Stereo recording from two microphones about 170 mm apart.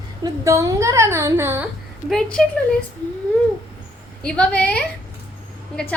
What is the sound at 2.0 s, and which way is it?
Speech, 5° left (ahead or behind).